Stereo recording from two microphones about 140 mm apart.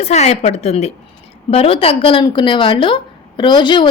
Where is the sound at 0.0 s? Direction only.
50° left (ahead or behind).